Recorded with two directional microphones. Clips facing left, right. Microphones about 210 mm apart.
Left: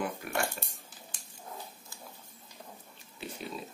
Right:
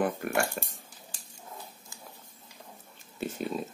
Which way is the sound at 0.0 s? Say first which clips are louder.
Right 5 dB; 50° right (ahead or behind).